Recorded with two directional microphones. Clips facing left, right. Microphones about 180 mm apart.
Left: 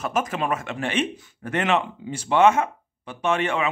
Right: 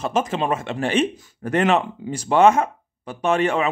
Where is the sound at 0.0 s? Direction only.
30° right (ahead or behind).